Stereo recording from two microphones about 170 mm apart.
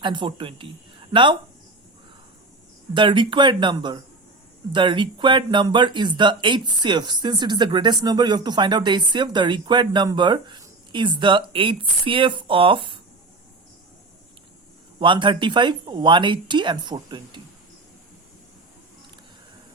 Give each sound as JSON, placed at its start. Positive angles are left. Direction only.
{"t": 0.0, "sound": "speech", "side_deg": -30}
{"t": 2.9, "sound": "speech", "side_deg": -30}
{"t": 14.9, "sound": "speech", "side_deg": -30}